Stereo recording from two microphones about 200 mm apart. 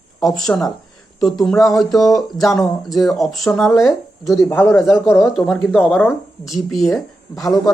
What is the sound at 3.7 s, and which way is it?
Speech, 15° left (ahead or behind).